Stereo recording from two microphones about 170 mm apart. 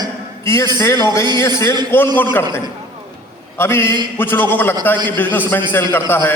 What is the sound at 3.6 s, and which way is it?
A man's voice, 15° left (ahead or behind).